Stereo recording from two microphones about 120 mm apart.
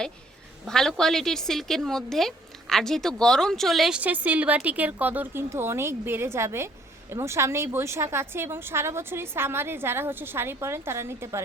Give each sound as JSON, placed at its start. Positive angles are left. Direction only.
{"t": 0.7, "sound": "a woman's voice", "side_deg": 5}